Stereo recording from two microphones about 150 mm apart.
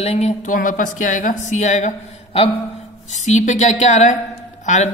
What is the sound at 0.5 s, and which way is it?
A woman's voice, 60° left (ahead or behind).